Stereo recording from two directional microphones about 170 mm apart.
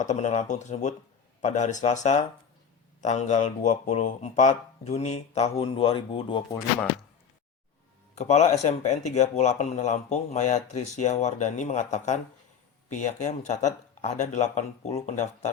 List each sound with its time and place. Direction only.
0.0 s speech: 45° left (ahead or behind); by 6.4 s 30° left (ahead or behind)
8.1 s speech: 40° left (ahead or behind)